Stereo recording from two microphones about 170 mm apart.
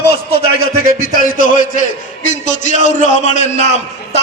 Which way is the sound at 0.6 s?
60° left (ahead or behind).